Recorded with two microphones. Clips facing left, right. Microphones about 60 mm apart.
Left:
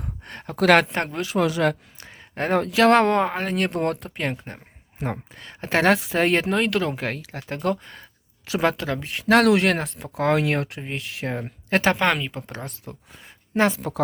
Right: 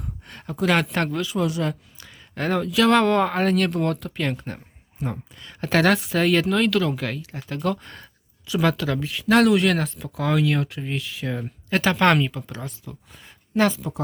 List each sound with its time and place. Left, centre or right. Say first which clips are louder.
0.0 s a sound: left 2 dB; left
0.6 s speech: left 5 dB; left
0.9 s speech: right 2 dB; left
1.3 s speech: left 3 dB; left
2.0 s a sound: left 1 dB; left
2.6 s speech: left 2 dB; left
4.9 s speech: left 1 dB; left
5.5 s speech: even; left
9.0 s speech: left 1 dB; left
11.9 s speech: right 4 dB; centre
12.5 s speech: even; left
13.7 s a woman's voice: left 2 dB; left